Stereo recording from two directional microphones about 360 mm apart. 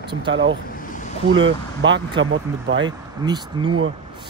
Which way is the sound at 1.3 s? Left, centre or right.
Right.